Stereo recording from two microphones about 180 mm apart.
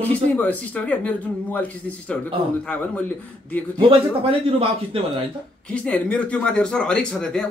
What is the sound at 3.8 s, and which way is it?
A man's voice, 30° right (ahead or behind).